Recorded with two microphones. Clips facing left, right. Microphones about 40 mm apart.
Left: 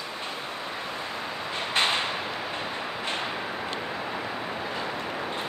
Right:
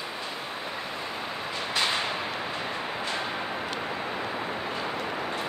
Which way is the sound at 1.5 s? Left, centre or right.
Left.